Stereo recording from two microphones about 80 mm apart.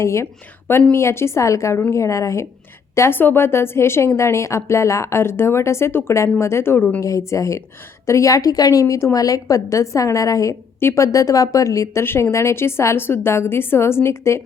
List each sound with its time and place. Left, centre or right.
0.0 s a woman's voice: left
0.7 s a woman's voice: left
0.9 s a woman's voice: left